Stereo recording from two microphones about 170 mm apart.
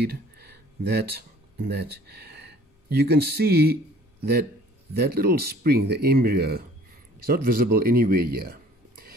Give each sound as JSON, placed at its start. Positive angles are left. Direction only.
{"t": 0.0, "sound": "a sound", "side_deg": -70}
{"t": 1.7, "sound": "speech", "side_deg": -80}
{"t": 4.9, "sound": "speech", "side_deg": -65}